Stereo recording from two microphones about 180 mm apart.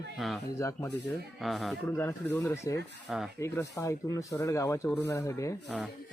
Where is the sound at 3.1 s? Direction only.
Centre (ahead or behind).